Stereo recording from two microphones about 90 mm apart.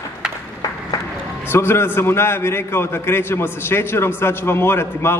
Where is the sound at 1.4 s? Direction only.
30° left (ahead or behind).